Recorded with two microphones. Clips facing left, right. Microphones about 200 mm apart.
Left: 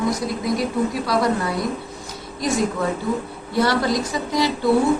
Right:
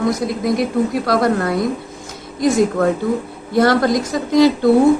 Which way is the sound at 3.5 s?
50° right (ahead or behind).